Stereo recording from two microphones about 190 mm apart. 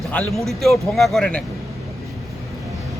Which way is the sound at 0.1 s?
5° left (ahead or behind).